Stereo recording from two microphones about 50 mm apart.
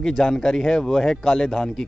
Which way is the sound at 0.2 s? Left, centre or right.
Centre.